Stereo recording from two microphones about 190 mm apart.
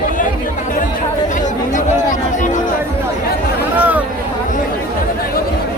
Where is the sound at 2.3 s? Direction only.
40° left (ahead or behind).